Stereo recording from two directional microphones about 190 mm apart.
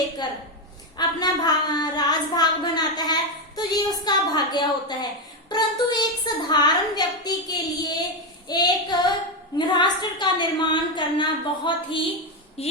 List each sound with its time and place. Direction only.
0.9 s speech: 20° left (ahead or behind)